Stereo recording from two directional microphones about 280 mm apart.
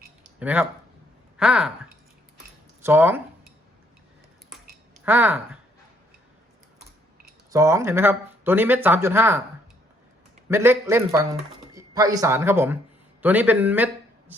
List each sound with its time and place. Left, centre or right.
0.3 s speech: centre
2.8 s speech: centre
5.0 s speech: centre
7.5 s speech: centre
10.5 s a man's voice: centre